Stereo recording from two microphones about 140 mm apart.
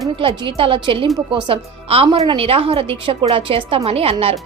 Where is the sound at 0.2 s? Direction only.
40° right (ahead or behind).